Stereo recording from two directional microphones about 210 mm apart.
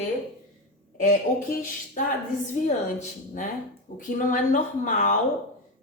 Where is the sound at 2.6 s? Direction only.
35° left (ahead or behind).